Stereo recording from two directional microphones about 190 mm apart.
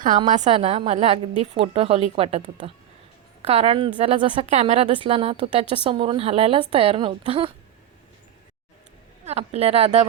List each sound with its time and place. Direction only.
0.3 s a woman's voice: 40° right (ahead or behind)
9.2 s a woman's voice: 35° right (ahead or behind)